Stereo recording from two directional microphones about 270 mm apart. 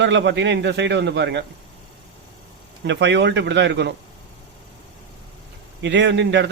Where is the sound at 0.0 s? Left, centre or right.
Right.